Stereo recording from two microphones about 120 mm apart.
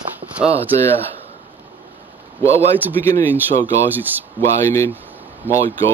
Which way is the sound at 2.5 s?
60° right (ahead or behind).